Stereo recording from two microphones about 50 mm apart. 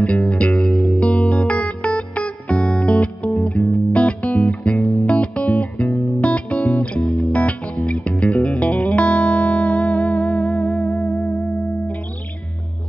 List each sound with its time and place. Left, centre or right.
0.0 s music: left
0.7 s music: centre
0.9 s music: left